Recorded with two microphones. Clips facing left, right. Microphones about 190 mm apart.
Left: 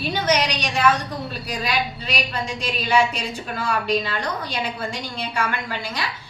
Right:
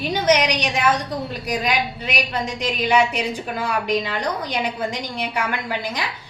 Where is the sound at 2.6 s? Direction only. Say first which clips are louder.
Right 2 dB; 15° right (ahead or behind).